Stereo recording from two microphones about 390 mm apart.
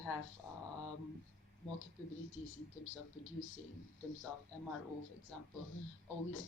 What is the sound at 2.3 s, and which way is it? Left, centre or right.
Speech, left.